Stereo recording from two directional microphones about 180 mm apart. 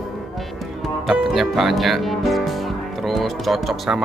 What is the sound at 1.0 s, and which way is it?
Speech, centre (ahead or behind).